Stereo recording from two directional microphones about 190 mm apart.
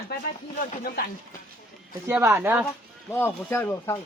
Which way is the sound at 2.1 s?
10° right (ahead or behind).